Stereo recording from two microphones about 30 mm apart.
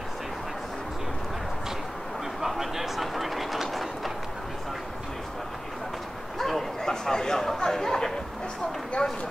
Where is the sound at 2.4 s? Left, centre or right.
Centre.